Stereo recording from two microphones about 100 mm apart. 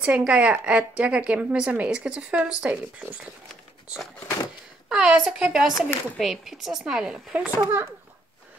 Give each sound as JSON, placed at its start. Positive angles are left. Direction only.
{"t": 0.0, "sound": "a woman's voice", "side_deg": -15}
{"t": 4.8, "sound": "a woman's voice", "side_deg": -5}
{"t": 7.5, "sound": "a child's voice", "side_deg": -25}